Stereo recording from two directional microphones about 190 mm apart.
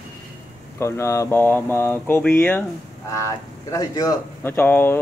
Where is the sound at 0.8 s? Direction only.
15° left (ahead or behind).